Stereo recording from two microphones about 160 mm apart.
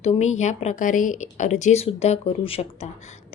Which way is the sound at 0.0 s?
45° left (ahead or behind).